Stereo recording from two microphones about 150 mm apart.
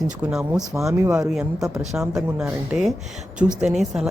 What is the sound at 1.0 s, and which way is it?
Speech, 20° right (ahead or behind).